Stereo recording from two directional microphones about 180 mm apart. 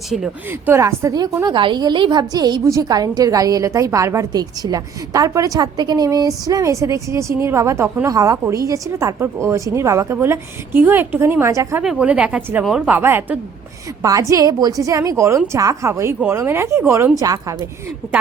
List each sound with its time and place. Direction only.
0.1 s speech: 5° right (ahead or behind)
0.7 s a woman's voice: 15° right (ahead or behind)
11.8 s a woman's voice: 5° right (ahead or behind)